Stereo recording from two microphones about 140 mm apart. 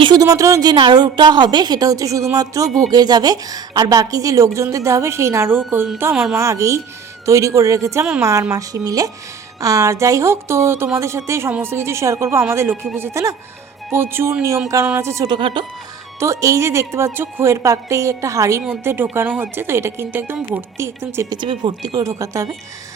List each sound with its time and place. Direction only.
0.0 s a woman's voice: 30° right (ahead or behind)
15.4 s speech: 40° right (ahead or behind)
16.2 s a woman's voice: 25° right (ahead or behind)
21.4 s a woman's voice: 35° right (ahead or behind)